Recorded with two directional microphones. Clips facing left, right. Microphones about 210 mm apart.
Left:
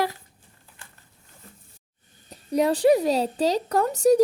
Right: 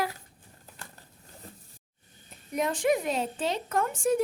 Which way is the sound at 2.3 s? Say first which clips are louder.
Left 8 dB; 35° left (ahead or behind).